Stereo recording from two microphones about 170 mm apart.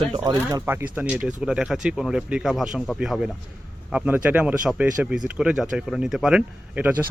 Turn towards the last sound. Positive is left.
turn(degrees=-5)  # may be behind; listen again after turning